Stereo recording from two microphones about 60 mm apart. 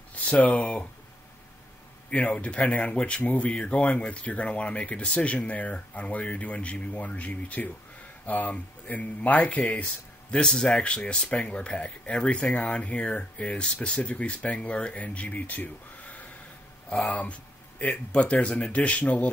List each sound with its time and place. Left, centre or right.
0.1 s speech: left
2.0 s speech: left